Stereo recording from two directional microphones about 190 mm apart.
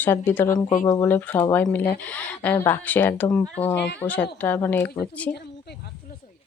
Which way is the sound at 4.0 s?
10° left (ahead or behind).